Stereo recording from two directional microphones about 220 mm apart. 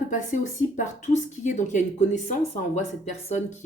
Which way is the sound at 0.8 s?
30° left (ahead or behind).